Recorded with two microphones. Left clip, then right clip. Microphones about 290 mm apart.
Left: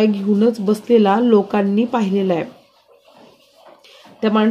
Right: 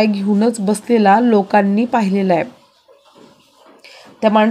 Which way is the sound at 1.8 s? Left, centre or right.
Centre.